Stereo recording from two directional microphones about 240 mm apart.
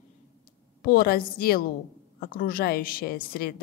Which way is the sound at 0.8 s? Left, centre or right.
Left.